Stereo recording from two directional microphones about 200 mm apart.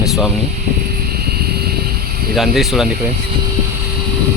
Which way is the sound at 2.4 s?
Centre (ahead or behind).